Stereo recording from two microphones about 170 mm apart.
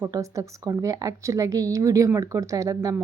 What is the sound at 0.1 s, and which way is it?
A woman's voice, 20° right (ahead or behind).